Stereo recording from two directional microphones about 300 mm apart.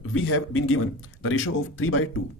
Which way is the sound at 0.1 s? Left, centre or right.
Left.